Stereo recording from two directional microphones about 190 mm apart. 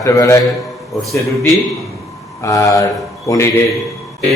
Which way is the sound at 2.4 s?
15° left (ahead or behind).